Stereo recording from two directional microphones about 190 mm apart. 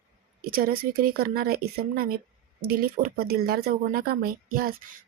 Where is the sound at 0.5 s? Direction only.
50° right (ahead or behind).